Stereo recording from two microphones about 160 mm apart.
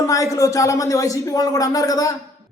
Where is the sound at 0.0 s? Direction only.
20° left (ahead or behind).